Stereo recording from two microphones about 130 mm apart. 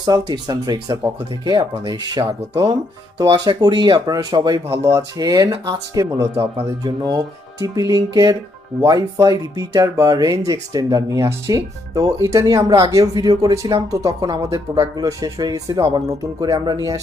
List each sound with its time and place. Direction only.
0.0 s speech: 30° right (ahead or behind)